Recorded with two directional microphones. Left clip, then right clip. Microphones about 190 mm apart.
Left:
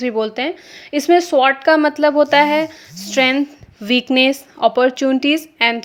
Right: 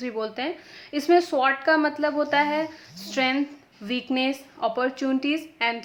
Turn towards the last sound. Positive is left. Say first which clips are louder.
# left 10 dB
turn(degrees=45)  # may be behind; listen again after turning